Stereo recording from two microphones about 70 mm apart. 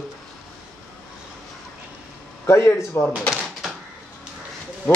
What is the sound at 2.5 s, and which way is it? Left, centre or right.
Speech, left.